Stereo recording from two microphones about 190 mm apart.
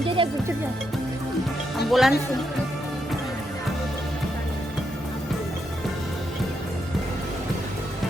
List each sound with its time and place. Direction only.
0.0 s music: 25° right (ahead or behind)
1.9 s speech: centre (ahead or behind)